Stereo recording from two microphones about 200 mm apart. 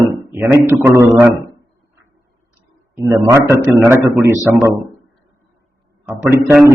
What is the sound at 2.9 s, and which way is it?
A man's voice, 15° right (ahead or behind).